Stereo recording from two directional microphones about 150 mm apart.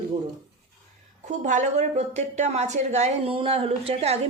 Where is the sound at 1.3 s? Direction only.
55° right (ahead or behind).